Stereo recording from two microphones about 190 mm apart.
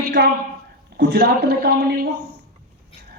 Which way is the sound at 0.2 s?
60° right (ahead or behind).